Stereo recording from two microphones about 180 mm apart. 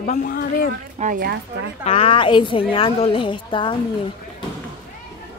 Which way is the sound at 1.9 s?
30° left (ahead or behind).